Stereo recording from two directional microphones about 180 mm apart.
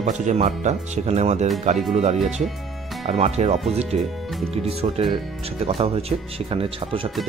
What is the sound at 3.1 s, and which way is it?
Speech, 35° right (ahead or behind).